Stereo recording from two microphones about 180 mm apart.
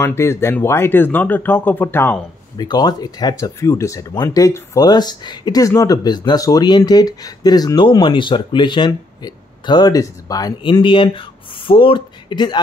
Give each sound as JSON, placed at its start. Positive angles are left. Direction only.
{"t": 0.0, "sound": "speech", "side_deg": 15}
{"t": 2.5, "sound": "speech", "side_deg": 25}